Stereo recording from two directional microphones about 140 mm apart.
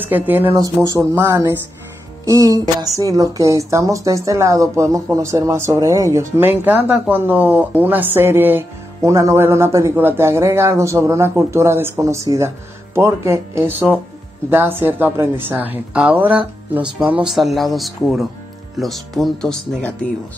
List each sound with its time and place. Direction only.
0.0 s a woman's voice: 15° right (ahead or behind); by 20.1 s 5° left (ahead or behind)